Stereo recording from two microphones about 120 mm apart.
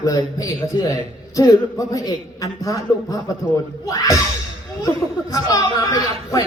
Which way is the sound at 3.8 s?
25° left (ahead or behind).